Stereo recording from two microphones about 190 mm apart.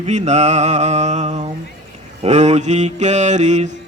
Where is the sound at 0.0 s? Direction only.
35° right (ahead or behind).